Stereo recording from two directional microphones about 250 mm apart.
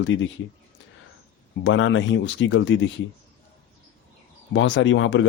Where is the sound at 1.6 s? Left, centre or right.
Left.